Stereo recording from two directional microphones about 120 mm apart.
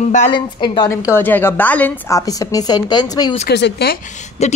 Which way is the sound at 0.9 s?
25° left (ahead or behind).